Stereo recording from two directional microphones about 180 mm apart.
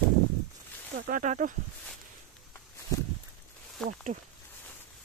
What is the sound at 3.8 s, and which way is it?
Speech, 5° left (ahead or behind).